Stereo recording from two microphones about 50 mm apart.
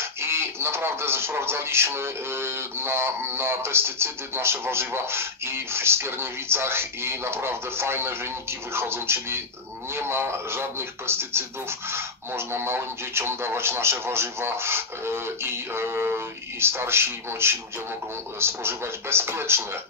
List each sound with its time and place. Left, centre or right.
0.2 s speech: right